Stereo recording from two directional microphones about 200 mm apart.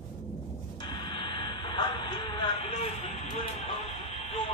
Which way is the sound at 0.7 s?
25° left (ahead or behind).